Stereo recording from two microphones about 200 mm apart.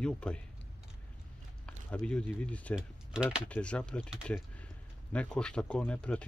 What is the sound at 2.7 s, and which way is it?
Speech, 5° right (ahead or behind).